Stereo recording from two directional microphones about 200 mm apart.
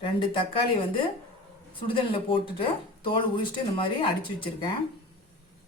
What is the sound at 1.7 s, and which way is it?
Speech, 25° left (ahead or behind).